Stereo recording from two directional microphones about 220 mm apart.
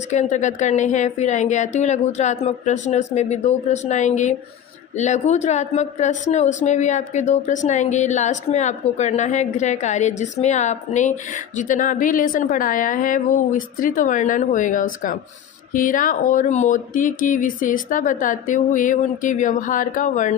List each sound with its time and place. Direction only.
0.1 s speech: 30° left (ahead or behind)